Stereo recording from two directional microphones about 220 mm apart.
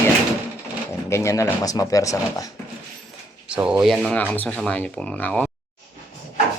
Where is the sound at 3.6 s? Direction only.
5° right (ahead or behind).